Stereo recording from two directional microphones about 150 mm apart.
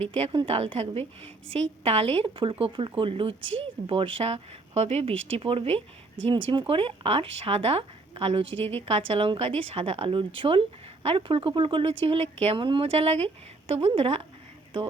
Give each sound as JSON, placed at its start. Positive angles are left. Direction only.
{"t": 0.0, "sound": "a woman's voice", "side_deg": -40}
{"t": 8.5, "sound": "a woman's voice", "side_deg": 15}
{"t": 8.9, "sound": "a woman's voice", "side_deg": -40}